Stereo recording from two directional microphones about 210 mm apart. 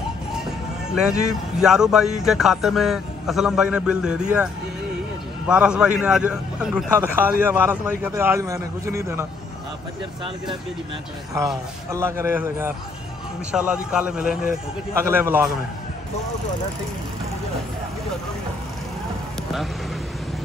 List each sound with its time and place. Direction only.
1.6 s a man's voice: 5° right (ahead or behind)
5.5 s a man's voice: 5° right (ahead or behind)
11.3 s a man's voice: 15° right (ahead or behind)